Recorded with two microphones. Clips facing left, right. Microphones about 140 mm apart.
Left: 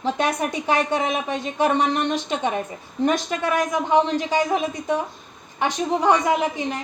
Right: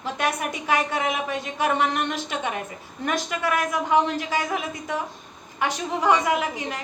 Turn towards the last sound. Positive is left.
turn(degrees=25)  # may be behind; listen again after turning